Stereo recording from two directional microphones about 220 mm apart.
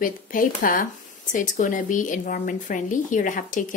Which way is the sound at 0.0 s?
35° left (ahead or behind).